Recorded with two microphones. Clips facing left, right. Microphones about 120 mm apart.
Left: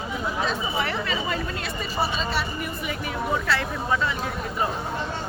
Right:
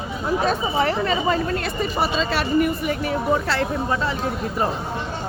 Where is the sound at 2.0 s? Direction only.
90° right.